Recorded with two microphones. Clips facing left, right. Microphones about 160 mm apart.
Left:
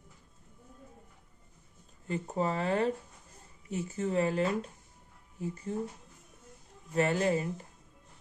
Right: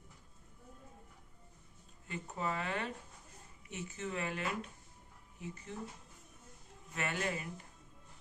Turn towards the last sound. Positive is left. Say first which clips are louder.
# left 10 dB
turn(degrees=30)  # may be behind; listen again after turning